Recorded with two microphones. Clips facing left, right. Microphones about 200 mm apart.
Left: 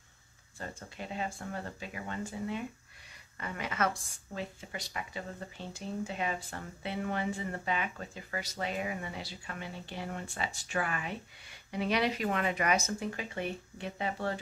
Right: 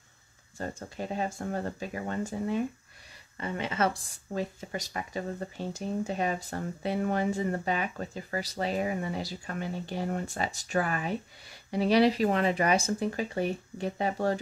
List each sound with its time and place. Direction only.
0.6 s speech: 40° right (ahead or behind)
3.3 s speech: 25° right (ahead or behind)